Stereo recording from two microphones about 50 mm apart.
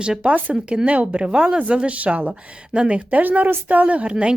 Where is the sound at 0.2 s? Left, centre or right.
Right.